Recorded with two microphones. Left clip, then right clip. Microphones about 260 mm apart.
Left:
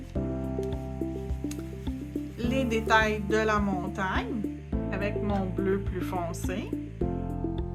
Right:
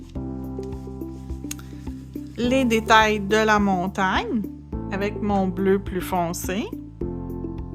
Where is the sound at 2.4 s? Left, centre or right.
Right.